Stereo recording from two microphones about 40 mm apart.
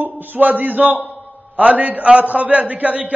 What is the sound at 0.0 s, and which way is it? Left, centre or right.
A man's voice, right.